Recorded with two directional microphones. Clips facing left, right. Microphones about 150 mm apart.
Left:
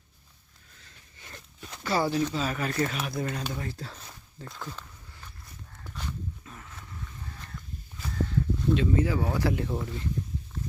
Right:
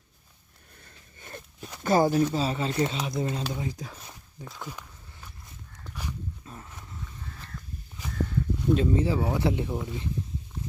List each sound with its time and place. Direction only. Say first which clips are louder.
0.8 s zipper: right 3 dB; 50° right (ahead or behind)
1.8 s speech: right 5 dB; 45° right (ahead or behind)
2.3 s speech: right 2 dB; 30° right (ahead or behind); by 4.4 s 10° right (ahead or behind)
4.4 s walk: even; 5° right (ahead or behind)
5.9 s dog: right 1 dB; 10° right (ahead or behind)
6.4 s a sound: right 3 dB; 25° right (ahead or behind)
8.7 s speech: right 2 dB; 35° right (ahead or behind)
9.7 s speech: even; 10° right (ahead or behind)